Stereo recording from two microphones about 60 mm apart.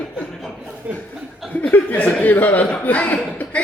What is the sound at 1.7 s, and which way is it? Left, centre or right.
A man's voice, left.